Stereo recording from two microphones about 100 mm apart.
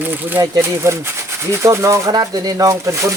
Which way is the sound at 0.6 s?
25° right (ahead or behind).